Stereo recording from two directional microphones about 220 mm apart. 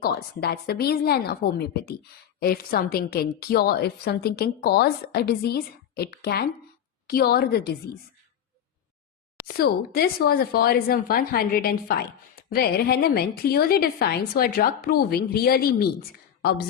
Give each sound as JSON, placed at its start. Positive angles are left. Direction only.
{"t": 0.0, "sound": "speech", "side_deg": 45}
{"t": 9.5, "sound": "speech", "side_deg": 45}